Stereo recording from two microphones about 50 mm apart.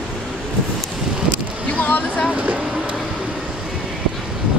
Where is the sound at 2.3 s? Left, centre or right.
Right.